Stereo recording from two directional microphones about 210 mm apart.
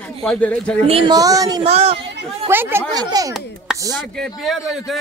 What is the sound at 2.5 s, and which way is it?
Speech, 10° right (ahead or behind).